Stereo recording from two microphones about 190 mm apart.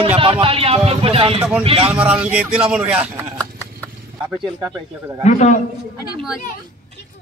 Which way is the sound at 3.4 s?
10° left (ahead or behind).